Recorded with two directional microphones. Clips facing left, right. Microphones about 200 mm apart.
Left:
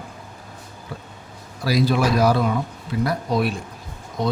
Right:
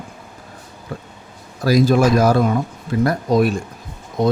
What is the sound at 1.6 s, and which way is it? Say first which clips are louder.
A man's voice: right 6 dB; 45° right (ahead or behind).